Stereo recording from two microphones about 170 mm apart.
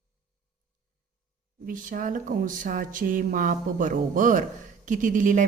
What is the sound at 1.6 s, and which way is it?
Speech, 55° right (ahead or behind).